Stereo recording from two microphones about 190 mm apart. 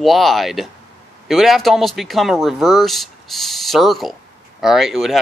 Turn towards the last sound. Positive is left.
turn(degrees=0)  # may be behind; listen again after turning